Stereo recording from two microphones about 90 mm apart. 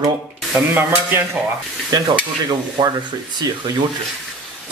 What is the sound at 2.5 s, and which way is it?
Speech, 50° right (ahead or behind).